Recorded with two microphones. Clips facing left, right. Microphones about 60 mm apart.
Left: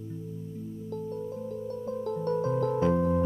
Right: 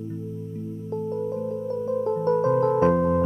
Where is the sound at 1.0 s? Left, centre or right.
Right.